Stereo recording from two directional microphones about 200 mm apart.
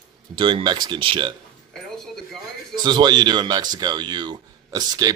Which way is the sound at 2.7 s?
20° right (ahead or behind).